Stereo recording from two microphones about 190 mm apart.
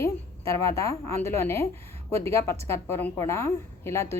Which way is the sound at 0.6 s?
15° left (ahead or behind).